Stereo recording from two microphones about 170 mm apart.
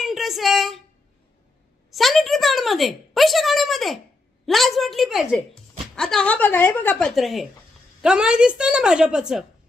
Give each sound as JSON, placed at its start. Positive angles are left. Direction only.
{"t": 0.0, "sound": "a sound", "side_deg": 0}
{"t": 1.9, "sound": "a woman's voice", "side_deg": 0}
{"t": 7.2, "sound": "a woman's voice", "side_deg": 0}